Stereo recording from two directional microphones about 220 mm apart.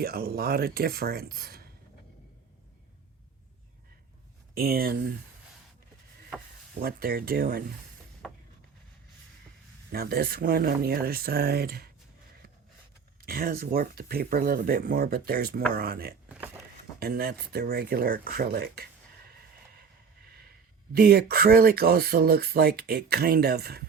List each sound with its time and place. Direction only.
0.0 s speech: 45° right (ahead or behind)
4.5 s speech: 45° right (ahead or behind)
6.8 s speech: 45° right (ahead or behind)
9.9 s speech: 45° right (ahead or behind)
13.2 s speech: 40° right (ahead or behind)
20.9 s speech: 45° right (ahead or behind)